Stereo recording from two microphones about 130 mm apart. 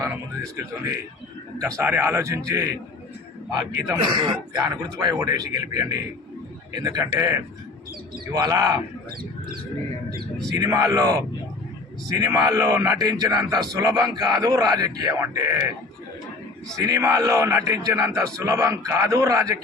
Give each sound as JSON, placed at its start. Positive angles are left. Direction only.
{"t": 1.5, "sound": "a man's voice", "side_deg": -25}
{"t": 10.6, "sound": "a man's voice", "side_deg": -25}
{"t": 16.7, "sound": "a man's voice", "side_deg": -25}